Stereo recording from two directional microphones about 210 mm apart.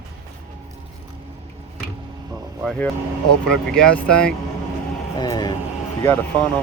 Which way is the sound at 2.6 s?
5° left (ahead or behind).